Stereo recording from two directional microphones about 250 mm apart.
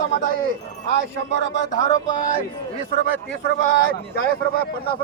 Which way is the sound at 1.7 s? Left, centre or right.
Left.